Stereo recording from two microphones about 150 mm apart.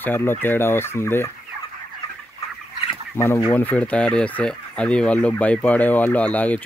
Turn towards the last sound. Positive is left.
turn(degrees=10)  # may be behind; listen again after turning